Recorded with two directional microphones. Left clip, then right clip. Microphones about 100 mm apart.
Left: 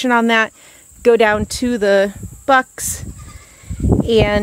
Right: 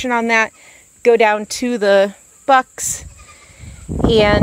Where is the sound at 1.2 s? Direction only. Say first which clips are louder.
Even; 40° left (ahead or behind).